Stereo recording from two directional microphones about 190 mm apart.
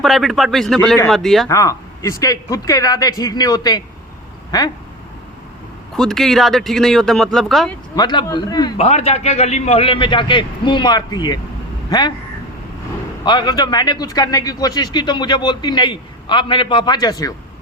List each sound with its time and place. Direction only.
0.0 s speech: centre (ahead or behind)
1.5 s a man's voice: 15° left (ahead or behind)
6.0 s speech: centre (ahead or behind)
7.9 s a man's voice: 20° left (ahead or behind)
8.8 s a man's voice: 35° left (ahead or behind)
13.2 s a man's voice: 25° left (ahead or behind)